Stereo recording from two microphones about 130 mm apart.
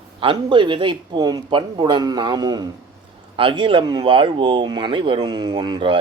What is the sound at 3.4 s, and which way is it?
Speech, 40° right (ahead or behind).